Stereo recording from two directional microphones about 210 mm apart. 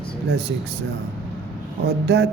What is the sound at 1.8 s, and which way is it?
Speech, 50° right (ahead or behind).